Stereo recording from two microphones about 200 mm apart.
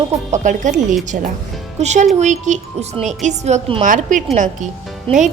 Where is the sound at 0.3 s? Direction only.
40° right (ahead or behind).